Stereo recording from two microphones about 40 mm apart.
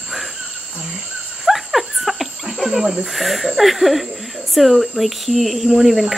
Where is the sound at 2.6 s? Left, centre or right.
Centre.